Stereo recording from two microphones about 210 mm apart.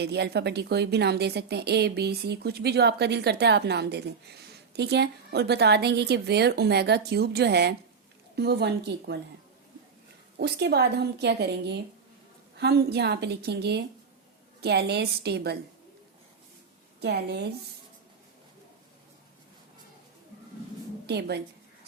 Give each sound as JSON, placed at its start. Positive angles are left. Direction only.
{"t": 0.0, "sound": "speech", "side_deg": -50}
{"t": 10.3, "sound": "speech", "side_deg": -50}
{"t": 17.0, "sound": "speech", "side_deg": -50}
{"t": 21.1, "sound": "speech", "side_deg": -50}